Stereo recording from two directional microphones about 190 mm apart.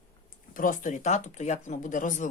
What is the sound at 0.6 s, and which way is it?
Speech, 45° left (ahead or behind).